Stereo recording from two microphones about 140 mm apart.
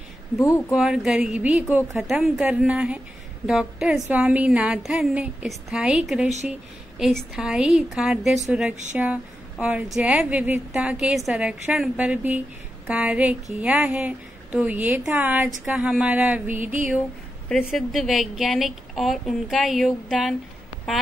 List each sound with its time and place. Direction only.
0.4 s speech: 20° left (ahead or behind)
0.7 s a woman's voice: 5° right (ahead or behind)
17.5 s a woman's voice: centre (ahead or behind)